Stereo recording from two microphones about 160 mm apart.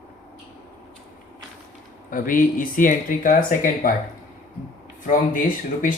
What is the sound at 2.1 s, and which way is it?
Speech, 60° left (ahead or behind).